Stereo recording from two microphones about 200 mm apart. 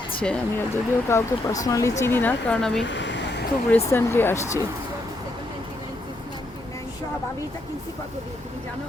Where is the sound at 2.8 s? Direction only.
65° left (ahead or behind).